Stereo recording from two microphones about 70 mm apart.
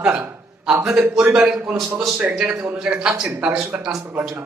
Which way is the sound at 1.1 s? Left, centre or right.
Centre.